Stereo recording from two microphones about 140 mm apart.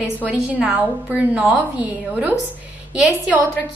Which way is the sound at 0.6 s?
10° right (ahead or behind).